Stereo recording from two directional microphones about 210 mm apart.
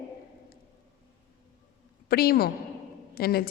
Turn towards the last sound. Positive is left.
turn(degrees=45)  # may be behind; listen again after turning